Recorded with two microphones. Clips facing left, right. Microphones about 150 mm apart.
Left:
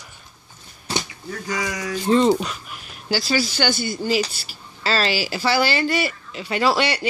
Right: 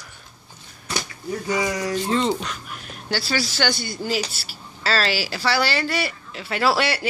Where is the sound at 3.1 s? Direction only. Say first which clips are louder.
Left 3 dB; centre (ahead or behind).